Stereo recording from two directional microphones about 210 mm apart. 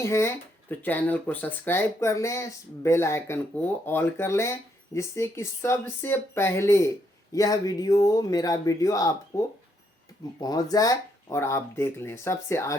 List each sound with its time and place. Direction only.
0.0 s speech: 10° left (ahead or behind)
10.4 s speech: 20° left (ahead or behind)